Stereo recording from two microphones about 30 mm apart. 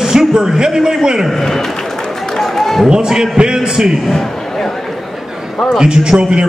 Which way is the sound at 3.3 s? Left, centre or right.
Right.